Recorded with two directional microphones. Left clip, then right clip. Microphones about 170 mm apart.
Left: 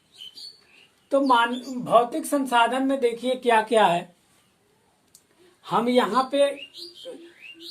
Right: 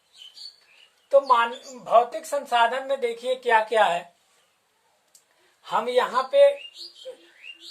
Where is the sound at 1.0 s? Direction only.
20° left (ahead or behind).